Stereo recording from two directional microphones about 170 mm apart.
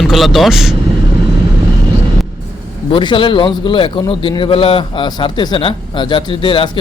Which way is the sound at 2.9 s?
30° left (ahead or behind).